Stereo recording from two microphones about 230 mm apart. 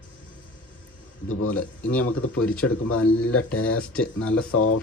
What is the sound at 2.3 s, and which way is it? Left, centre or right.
Speech, centre.